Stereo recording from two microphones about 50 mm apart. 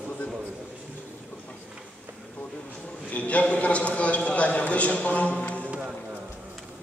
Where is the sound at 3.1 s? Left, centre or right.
Left.